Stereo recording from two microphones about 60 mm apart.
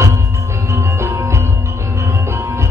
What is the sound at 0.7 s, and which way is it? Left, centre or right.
Music, right.